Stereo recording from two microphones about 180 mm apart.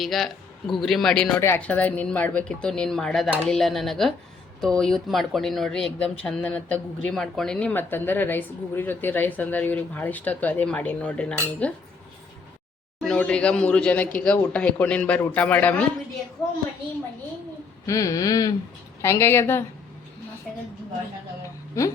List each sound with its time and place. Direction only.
0.0 s speech: centre (ahead or behind)
13.0 s speech: 5° left (ahead or behind)
17.8 s a sound: 20° left (ahead or behind)
19.0 s speech: 15° left (ahead or behind)